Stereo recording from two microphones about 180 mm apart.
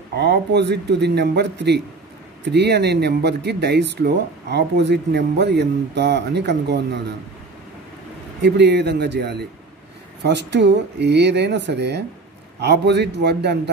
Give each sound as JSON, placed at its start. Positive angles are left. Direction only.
{"t": 0.2, "sound": "speech", "side_deg": -70}
{"t": 8.4, "sound": "speech", "side_deg": -70}